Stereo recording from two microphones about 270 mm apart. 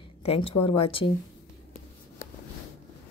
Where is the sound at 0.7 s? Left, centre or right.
Centre.